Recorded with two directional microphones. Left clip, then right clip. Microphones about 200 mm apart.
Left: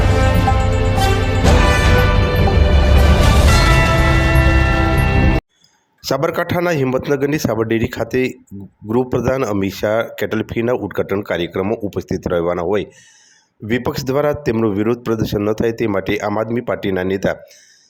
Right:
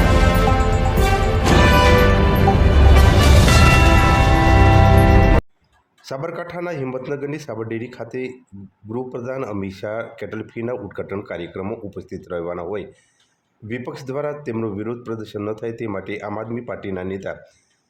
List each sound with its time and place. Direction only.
0.0 s music: centre (ahead or behind)
6.1 s a man's voice: 40° left (ahead or behind)